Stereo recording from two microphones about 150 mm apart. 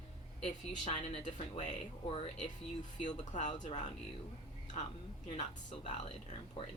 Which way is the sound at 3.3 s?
55° left (ahead or behind).